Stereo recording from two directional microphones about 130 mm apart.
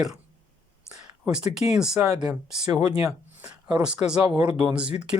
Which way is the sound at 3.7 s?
10° right (ahead or behind).